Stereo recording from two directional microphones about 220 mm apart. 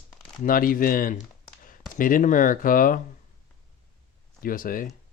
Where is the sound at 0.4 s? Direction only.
40° left (ahead or behind).